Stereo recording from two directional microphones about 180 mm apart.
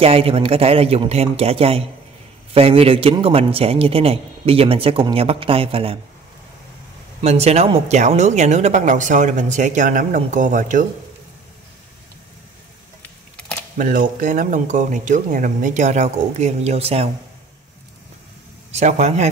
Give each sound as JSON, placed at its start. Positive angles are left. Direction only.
{"t": 0.0, "sound": "a man's voice", "side_deg": -35}
{"t": 7.2, "sound": "speech", "side_deg": -35}
{"t": 13.7, "sound": "speech", "side_deg": -50}
{"t": 18.7, "sound": "a man's voice", "side_deg": -40}